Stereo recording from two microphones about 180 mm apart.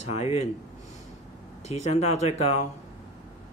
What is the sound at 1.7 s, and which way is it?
Speech, 40° left (ahead or behind).